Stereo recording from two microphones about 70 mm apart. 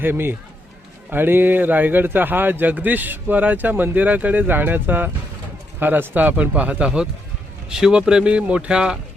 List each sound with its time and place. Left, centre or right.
0.0 s a man's voice: right; by 9.0 s centre